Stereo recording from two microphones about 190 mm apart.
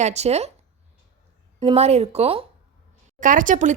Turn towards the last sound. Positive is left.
turn(degrees=-40)  # may be behind; listen again after turning